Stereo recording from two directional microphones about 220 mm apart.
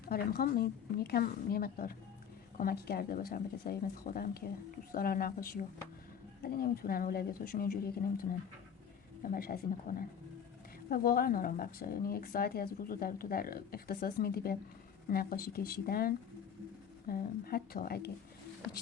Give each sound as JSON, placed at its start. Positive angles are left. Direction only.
{"t": 0.0, "sound": "speech", "side_deg": 45}